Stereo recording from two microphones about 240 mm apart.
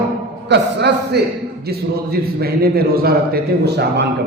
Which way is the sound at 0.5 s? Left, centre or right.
Right.